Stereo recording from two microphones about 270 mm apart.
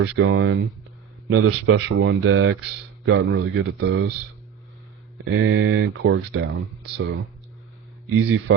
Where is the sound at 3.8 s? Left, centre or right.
Right.